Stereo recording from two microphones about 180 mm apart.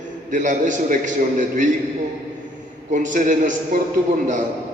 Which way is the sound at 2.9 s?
45° right (ahead or behind).